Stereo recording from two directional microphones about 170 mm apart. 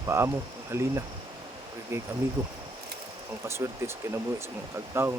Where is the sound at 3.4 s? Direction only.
15° right (ahead or behind).